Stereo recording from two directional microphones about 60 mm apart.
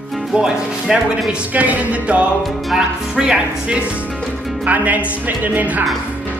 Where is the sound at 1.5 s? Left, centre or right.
Right.